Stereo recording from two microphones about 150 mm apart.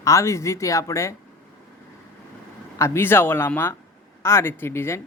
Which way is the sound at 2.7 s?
20° left (ahead or behind).